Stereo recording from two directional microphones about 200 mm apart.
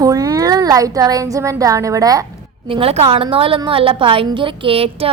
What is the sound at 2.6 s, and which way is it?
A woman's voice, 25° right (ahead or behind).